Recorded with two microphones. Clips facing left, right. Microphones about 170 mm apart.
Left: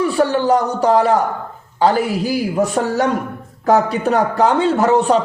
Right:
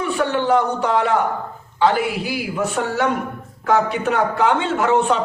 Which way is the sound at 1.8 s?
40° left (ahead or behind).